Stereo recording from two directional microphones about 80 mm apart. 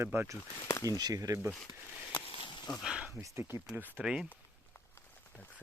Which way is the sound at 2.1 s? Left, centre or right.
Left.